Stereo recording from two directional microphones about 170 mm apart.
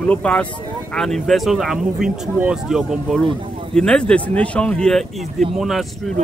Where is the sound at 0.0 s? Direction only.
5° left (ahead or behind).